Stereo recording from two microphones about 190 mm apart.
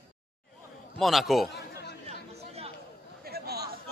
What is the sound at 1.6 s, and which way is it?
Chatter, 60° left (ahead or behind).